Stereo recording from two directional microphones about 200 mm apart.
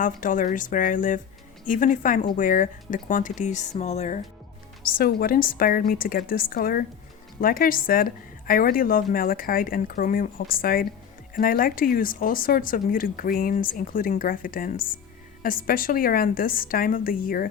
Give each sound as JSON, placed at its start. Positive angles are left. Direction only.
{"t": 0.0, "sound": "a woman's voice", "side_deg": 40}
{"t": 4.8, "sound": "speech", "side_deg": 45}